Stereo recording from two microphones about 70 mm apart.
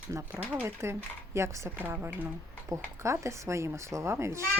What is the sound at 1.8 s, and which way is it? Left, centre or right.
Speech, right.